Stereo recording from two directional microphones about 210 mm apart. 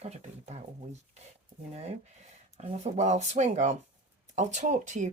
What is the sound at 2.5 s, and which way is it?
Speech, 30° right (ahead or behind).